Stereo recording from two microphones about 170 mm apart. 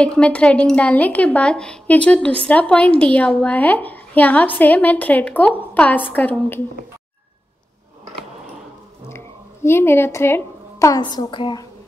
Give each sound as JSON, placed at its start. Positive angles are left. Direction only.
{"t": 0.0, "sound": "speech", "side_deg": 5}
{"t": 9.1, "sound": "speech", "side_deg": 15}